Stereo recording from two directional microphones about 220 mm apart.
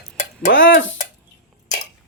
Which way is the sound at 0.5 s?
60° left (ahead or behind).